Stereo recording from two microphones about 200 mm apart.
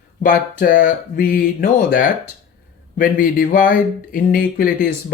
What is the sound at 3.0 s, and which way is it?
Speech, 40° left (ahead or behind).